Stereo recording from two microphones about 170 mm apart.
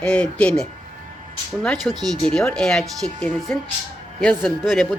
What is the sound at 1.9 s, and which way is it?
Speech, 25° right (ahead or behind).